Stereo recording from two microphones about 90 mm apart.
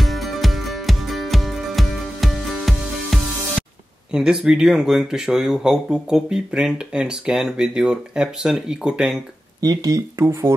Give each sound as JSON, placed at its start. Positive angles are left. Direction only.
{"t": 0.0, "sound": "music", "side_deg": 0}
{"t": 4.1, "sound": "speech", "side_deg": -10}
{"t": 9.6, "sound": "speech", "side_deg": -45}
{"t": 10.1, "sound": "speech", "side_deg": -25}